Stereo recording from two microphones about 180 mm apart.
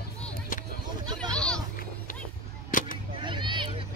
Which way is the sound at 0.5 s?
50° left (ahead or behind).